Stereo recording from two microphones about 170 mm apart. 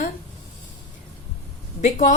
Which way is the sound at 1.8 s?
45° left (ahead or behind).